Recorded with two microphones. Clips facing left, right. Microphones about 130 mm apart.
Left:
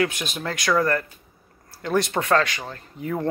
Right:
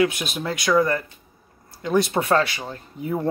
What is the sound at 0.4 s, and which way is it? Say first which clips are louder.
Speech: right 2 dB; 15° right (ahead or behind).